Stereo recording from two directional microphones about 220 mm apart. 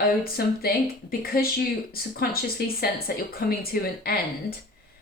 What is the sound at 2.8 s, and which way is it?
Speech, 45° left (ahead or behind).